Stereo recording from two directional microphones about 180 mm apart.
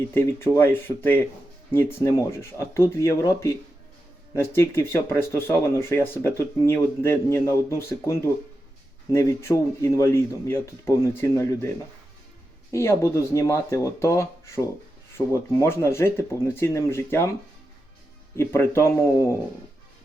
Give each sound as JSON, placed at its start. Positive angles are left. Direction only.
{"t": 0.1, "sound": "speech", "side_deg": 15}
{"t": 12.7, "sound": "speech", "side_deg": 15}
{"t": 18.3, "sound": "speech", "side_deg": 15}